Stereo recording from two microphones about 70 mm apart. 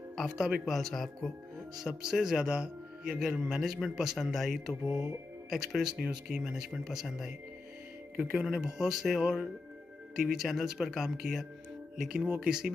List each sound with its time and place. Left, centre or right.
0.1 s speech: centre
1.9 s a man's voice: centre